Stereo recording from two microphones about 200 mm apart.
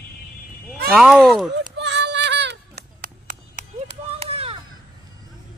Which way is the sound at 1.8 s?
60° right (ahead or behind).